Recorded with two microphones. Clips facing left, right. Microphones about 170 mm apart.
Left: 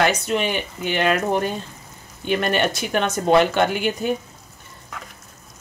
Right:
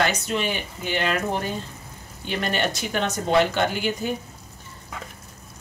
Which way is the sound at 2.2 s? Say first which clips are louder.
Left 5 dB; 55° left (ahead or behind).